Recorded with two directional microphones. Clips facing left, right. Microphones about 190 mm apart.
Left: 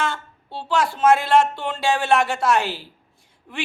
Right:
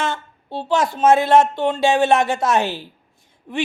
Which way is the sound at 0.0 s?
20° right (ahead or behind).